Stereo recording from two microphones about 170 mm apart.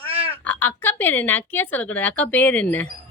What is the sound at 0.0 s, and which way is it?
Frog, 35° right (ahead or behind).